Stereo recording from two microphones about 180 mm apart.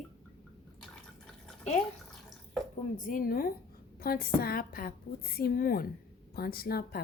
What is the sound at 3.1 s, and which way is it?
A woman's voice, 50° left (ahead or behind).